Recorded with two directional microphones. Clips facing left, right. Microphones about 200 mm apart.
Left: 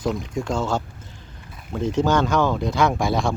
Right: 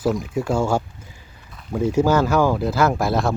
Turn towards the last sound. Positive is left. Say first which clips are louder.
# right 2 dB
turn(degrees=0)  # may be behind; listen again after turning